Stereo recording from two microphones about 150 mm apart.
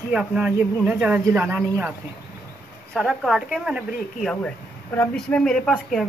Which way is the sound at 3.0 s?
Centre (ahead or behind).